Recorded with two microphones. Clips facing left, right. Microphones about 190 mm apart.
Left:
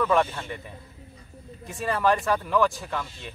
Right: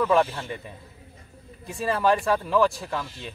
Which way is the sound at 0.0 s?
5° right (ahead or behind).